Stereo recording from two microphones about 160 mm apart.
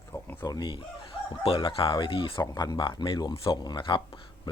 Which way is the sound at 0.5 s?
30° left (ahead or behind).